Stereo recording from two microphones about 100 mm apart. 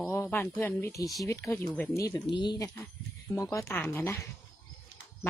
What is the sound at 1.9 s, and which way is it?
Speech, 35° left (ahead or behind).